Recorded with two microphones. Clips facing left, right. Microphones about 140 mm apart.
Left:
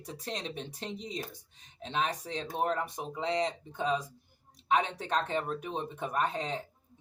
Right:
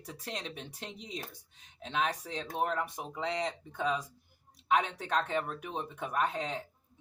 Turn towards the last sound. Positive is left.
turn(degrees=30)  # may be behind; listen again after turning